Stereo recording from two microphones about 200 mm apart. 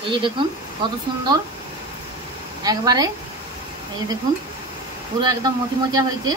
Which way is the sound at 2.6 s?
20° right (ahead or behind).